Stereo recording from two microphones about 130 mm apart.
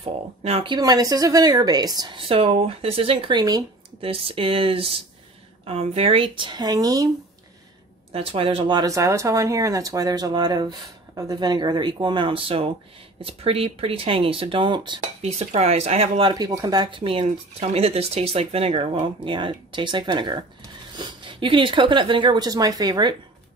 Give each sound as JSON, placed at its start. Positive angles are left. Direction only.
{"t": 0.0, "sound": "speech", "side_deg": -50}
{"t": 0.7, "sound": "speech", "side_deg": -30}
{"t": 4.0, "sound": "speech", "side_deg": -45}
{"t": 8.1, "sound": "speech", "side_deg": -45}
{"t": 8.8, "sound": "speech", "side_deg": -25}
{"t": 15.0, "sound": "speech", "side_deg": -55}
{"t": 16.3, "sound": "speech", "side_deg": -30}